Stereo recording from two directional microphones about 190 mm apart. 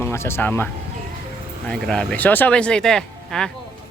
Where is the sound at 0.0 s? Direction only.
15° left (ahead or behind).